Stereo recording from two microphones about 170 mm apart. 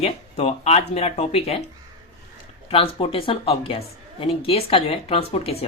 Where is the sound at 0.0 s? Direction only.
40° left (ahead or behind).